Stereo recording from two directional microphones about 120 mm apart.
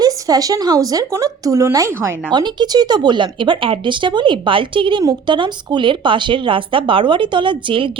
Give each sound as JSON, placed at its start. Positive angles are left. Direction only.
{"t": 0.0, "sound": "speech", "side_deg": -30}
{"t": 2.3, "sound": "speech", "side_deg": -35}